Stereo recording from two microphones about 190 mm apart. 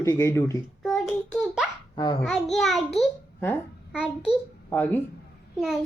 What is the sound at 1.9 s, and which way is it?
Speech, 25° left (ahead or behind).